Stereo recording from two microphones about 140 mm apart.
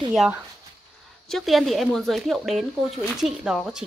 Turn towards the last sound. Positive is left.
turn(degrees=-5)  # may be behind; listen again after turning